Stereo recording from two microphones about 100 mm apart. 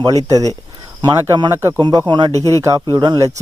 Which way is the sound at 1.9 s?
50° right (ahead or behind).